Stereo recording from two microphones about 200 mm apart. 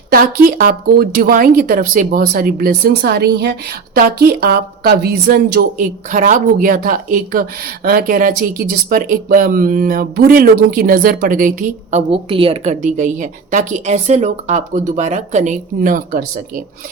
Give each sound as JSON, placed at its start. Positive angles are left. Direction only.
{"t": 0.1, "sound": "speech", "side_deg": -45}